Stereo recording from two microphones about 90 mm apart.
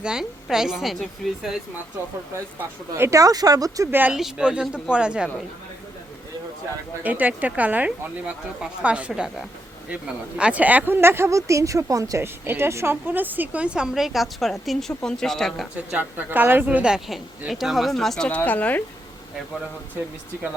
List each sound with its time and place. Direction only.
0.0 s speech: 5° right (ahead or behind)
2.9 s speech: 35° right (ahead or behind)
4.1 s speech: 10° right (ahead or behind)
7.0 s speech: 15° right (ahead or behind); by 12.2 s 40° right (ahead or behind)
12.2 s speech: 25° right (ahead or behind); by 15.6 s 5° left (ahead or behind)
15.9 s speech: 15° right (ahead or behind); by 18.3 s 5° left (ahead or behind)
18.3 s speech: 20° left (ahead or behind)